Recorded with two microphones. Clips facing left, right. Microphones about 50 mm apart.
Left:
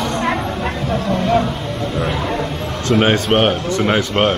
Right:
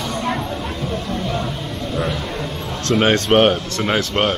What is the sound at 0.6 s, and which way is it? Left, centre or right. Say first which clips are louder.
Bow-wow: left 4 dB; left.